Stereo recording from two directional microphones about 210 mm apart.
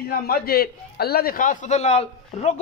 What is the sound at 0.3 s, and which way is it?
A man's voice, 45° left (ahead or behind).